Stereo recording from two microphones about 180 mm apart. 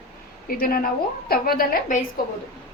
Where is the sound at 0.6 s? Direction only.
55° left (ahead or behind).